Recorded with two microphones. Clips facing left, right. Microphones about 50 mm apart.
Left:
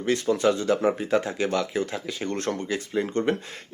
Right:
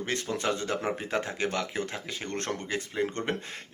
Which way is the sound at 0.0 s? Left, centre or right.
Right.